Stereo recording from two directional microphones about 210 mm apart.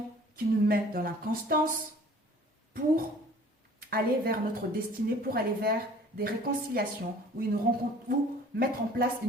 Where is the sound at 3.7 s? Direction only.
45° right (ahead or behind).